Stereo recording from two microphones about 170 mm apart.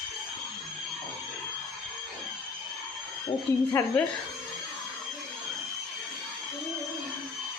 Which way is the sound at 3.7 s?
15° left (ahead or behind).